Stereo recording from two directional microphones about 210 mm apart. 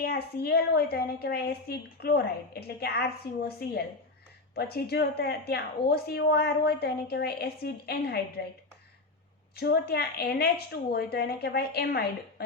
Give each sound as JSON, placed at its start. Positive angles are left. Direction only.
{"t": 0.0, "sound": "a woman's voice", "side_deg": 50}
{"t": 9.6, "sound": "a woman's voice", "side_deg": 50}